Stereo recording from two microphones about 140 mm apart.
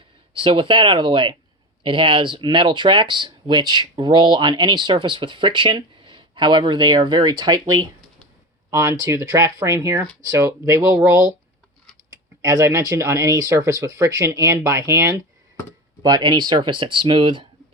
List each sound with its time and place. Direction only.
0.3 s speech: 40° right (ahead or behind); by 11.3 s 20° right (ahead or behind)
12.4 s speech: 25° right (ahead or behind)